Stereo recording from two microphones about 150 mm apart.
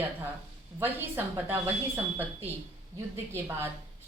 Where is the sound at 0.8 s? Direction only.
15° right (ahead or behind).